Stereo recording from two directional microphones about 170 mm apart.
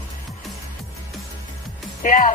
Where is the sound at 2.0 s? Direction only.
50° left (ahead or behind).